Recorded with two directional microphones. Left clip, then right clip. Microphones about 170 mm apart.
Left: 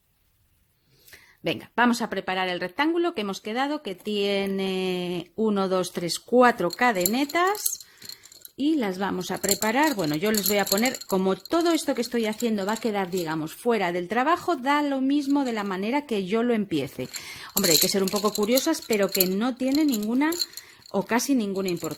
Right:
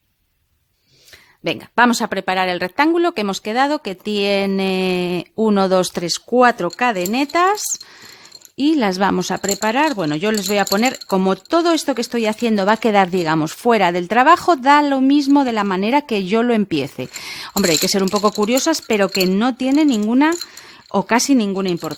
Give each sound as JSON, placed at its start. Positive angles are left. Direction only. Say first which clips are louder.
{"t": 1.5, "sound": "speech", "louder": "right 8 dB", "side_deg": -35}
{"t": 8.5, "sound": "speech", "louder": "right 9 dB", "side_deg": -45}
{"t": 9.4, "sound": "speech", "louder": "right 4 dB", "side_deg": -30}